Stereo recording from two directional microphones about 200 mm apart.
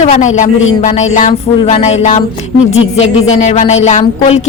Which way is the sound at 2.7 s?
75° left (ahead or behind).